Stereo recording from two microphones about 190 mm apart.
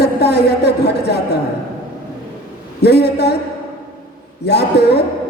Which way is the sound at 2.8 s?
60° left (ahead or behind).